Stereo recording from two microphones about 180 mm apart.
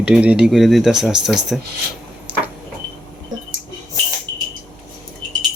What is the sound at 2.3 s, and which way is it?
Sliding door, 10° right (ahead or behind).